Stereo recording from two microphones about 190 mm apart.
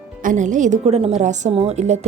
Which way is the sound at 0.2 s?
40° right (ahead or behind).